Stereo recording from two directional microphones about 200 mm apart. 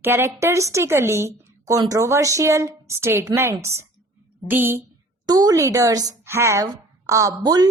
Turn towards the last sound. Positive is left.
turn(degrees=-20)  # may be behind; listen again after turning